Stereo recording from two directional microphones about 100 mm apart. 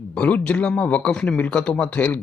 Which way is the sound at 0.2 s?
15° left (ahead or behind).